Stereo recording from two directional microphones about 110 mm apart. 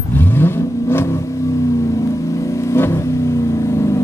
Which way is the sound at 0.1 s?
20° left (ahead or behind).